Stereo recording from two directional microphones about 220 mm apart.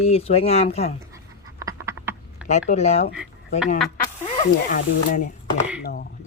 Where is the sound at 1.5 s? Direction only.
15° right (ahead or behind).